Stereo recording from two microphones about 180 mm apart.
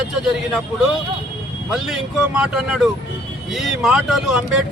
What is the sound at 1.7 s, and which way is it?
Speech, 5° right (ahead or behind).